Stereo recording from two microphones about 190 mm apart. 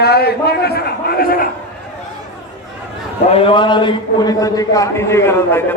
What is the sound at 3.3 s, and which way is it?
A man's voice, 30° left (ahead or behind).